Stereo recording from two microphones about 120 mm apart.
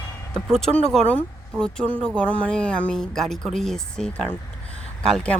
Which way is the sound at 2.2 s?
10° left (ahead or behind).